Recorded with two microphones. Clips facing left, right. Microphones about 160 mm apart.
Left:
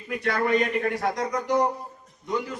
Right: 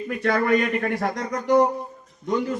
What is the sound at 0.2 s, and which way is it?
A man's voice, 50° right (ahead or behind).